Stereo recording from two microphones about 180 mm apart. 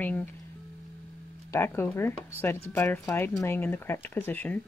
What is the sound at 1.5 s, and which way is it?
Speech, 15° left (ahead or behind).